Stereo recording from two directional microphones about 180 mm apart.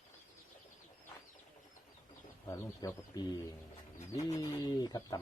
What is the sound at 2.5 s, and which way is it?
Speech, 20° left (ahead or behind).